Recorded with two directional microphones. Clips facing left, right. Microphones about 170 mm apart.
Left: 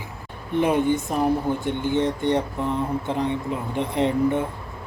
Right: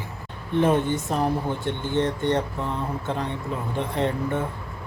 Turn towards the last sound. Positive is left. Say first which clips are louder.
# left 4 dB
turn(degrees=15)  # may be behind; listen again after turning